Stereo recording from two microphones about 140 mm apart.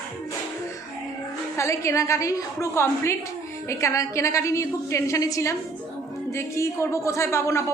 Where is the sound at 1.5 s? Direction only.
20° left (ahead or behind).